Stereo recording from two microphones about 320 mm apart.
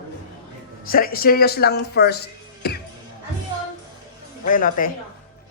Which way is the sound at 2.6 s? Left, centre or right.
Left.